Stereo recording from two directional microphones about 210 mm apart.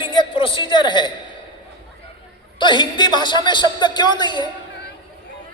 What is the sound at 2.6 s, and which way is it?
A man's voice, 20° left (ahead or behind).